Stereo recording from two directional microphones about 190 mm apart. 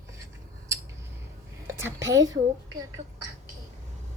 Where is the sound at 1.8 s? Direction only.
15° right (ahead or behind).